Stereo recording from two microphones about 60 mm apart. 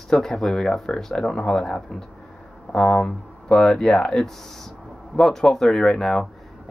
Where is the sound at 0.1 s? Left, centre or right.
Centre.